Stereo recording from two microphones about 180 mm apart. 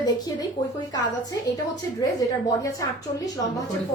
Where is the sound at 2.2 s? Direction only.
20° left (ahead or behind).